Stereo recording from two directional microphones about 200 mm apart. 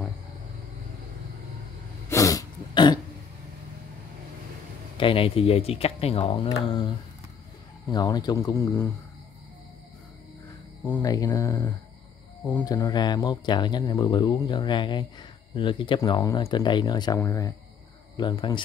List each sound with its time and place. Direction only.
2.0 s throat clearing: 15° left (ahead or behind)
4.9 s speech: 25° left (ahead or behind)
7.9 s speech: 20° left (ahead or behind)
10.8 s speech: 15° left (ahead or behind)